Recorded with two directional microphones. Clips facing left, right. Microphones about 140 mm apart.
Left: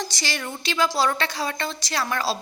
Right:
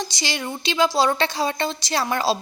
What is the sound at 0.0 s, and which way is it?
A woman's voice, 15° right (ahead or behind).